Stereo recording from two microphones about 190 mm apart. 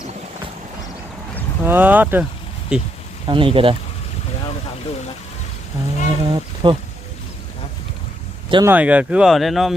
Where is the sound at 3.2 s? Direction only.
25° right (ahead or behind).